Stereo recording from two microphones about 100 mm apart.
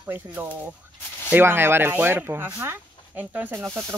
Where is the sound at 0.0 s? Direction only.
20° right (ahead or behind).